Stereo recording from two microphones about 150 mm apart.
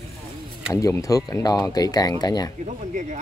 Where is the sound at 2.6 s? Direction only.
55° right (ahead or behind).